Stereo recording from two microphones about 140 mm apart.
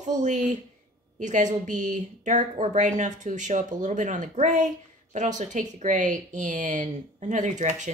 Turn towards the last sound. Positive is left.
turn(degrees=-60)  # may be behind; listen again after turning